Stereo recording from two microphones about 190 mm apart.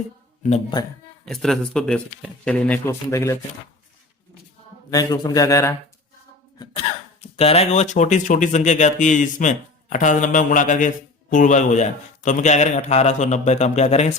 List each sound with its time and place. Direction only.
1.2 s speech: centre (ahead or behind)
4.9 s speech: 20° left (ahead or behind)
6.6 s throat clearing: 20° left (ahead or behind)
7.3 s speech: 30° left (ahead or behind)